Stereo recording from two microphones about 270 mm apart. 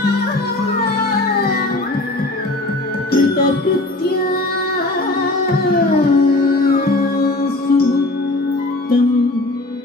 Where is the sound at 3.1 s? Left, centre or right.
Left.